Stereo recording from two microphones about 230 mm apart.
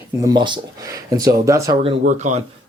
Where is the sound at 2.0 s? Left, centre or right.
Right.